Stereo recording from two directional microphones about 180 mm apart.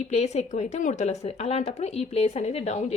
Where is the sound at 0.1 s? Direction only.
35° left (ahead or behind).